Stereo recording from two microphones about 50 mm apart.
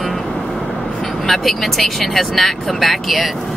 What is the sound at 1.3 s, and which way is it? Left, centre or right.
Speech, centre.